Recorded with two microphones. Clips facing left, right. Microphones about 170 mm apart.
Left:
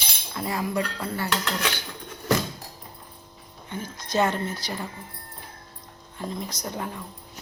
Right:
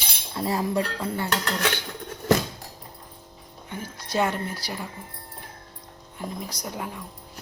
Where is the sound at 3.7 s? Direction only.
10° right (ahead or behind).